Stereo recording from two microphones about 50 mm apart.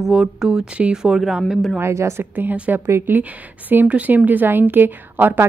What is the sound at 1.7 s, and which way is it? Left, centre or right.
Speech, right.